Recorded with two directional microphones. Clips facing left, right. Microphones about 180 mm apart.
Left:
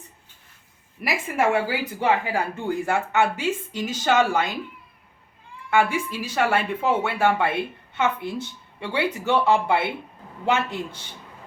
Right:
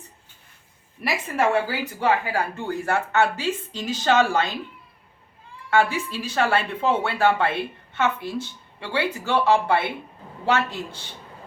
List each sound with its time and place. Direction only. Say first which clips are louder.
1.4 s speech: even; 15° left (ahead or behind)
5.7 s speech: even; 10° left (ahead or behind)